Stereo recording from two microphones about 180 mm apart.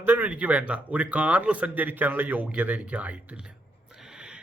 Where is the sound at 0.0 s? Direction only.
10° right (ahead or behind).